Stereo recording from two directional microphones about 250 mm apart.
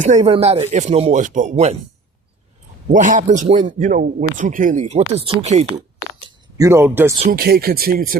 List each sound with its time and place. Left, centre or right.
0.0 s speech: right
2.9 s speech: right
5.4 s a sound: right
6.7 s speech: centre
7.2 s speech: right